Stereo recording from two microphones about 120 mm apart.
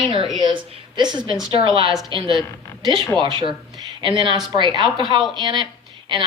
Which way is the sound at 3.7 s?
40° right (ahead or behind).